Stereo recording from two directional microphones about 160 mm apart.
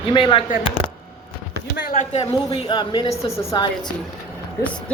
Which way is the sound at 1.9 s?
45° left (ahead or behind).